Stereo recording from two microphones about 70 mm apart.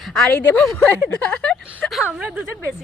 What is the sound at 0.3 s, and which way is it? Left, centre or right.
Speech, left.